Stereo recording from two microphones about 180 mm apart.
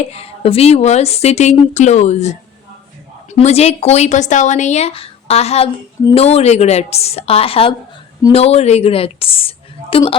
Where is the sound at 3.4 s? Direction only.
35° left (ahead or behind).